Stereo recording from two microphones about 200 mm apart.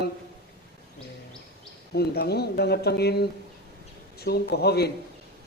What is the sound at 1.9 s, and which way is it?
Speech, 55° left (ahead or behind).